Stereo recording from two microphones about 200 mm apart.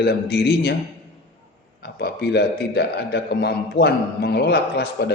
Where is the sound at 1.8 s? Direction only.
55° left (ahead or behind).